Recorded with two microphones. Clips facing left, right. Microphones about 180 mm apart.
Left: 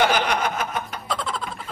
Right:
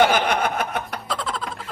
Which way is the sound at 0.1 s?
55° right (ahead or behind).